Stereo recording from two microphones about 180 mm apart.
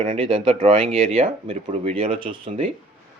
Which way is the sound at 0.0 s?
45° right (ahead or behind).